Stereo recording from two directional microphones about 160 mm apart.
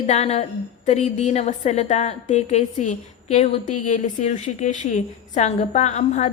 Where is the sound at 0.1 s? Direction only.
40° left (ahead or behind).